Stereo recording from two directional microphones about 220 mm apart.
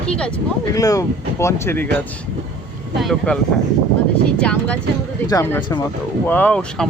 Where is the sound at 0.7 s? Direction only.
15° left (ahead or behind).